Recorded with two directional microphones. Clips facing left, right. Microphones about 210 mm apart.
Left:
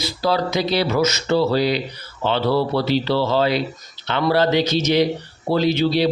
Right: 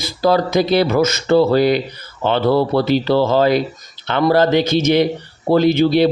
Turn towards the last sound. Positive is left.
turn(degrees=-55)  # may be behind; listen again after turning